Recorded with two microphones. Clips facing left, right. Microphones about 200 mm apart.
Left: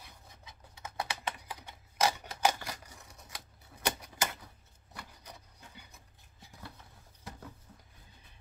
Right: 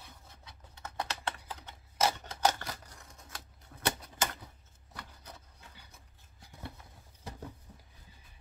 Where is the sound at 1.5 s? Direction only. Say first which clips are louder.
Even; 10° left (ahead or behind).